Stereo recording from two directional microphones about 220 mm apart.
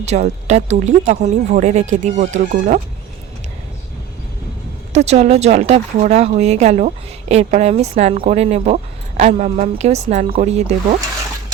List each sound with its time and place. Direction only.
0.0 s speech: 30° right (ahead or behind)
4.9 s speech: 30° right (ahead or behind)